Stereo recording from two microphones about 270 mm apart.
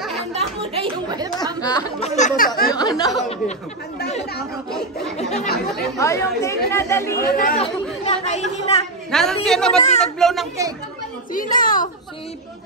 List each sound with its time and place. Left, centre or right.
0.3 s chatter: right
1.6 s speech: centre; by 2.7 s left
2.7 s chatter: centre
5.1 s chatter: left
5.9 s speech: centre
7.2 s speech: left
7.6 s chatter: left
9.1 s a woman's voice: centre
11.5 s a child's voice: left